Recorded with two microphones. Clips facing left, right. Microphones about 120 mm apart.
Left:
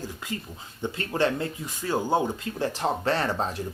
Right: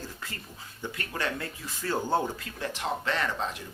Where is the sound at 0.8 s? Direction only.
25° left (ahead or behind).